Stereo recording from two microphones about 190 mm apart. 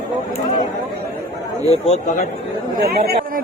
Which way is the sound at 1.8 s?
35° left (ahead or behind).